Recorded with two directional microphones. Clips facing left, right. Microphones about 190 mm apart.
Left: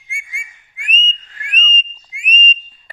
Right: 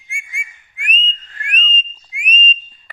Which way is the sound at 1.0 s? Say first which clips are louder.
Right 1 dB; 5° left (ahead or behind).